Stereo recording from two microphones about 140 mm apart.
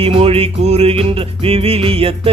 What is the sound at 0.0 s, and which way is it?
Music, 45° right (ahead or behind).